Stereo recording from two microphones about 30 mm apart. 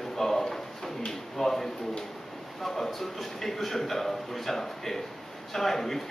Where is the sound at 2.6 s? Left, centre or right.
Centre.